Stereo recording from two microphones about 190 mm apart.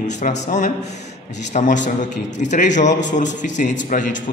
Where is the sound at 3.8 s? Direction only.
45° left (ahead or behind).